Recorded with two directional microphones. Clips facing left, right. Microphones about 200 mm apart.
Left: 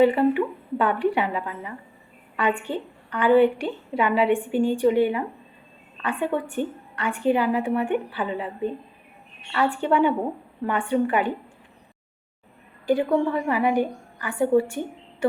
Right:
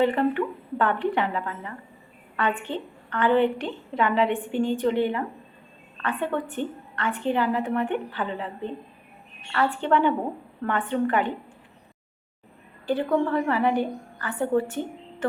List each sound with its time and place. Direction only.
0.0 s a woman's voice: 10° left (ahead or behind)
12.8 s a woman's voice: 10° left (ahead or behind)